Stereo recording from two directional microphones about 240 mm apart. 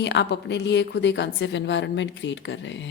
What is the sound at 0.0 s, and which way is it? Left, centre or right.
Speech, left.